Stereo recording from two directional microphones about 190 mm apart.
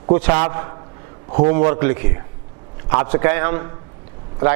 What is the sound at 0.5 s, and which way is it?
A man's voice, 20° right (ahead or behind).